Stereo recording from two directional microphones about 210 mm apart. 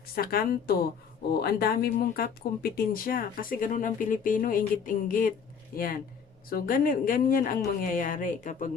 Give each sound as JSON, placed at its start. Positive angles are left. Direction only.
{"t": 0.2, "sound": "a woman's voice", "side_deg": 45}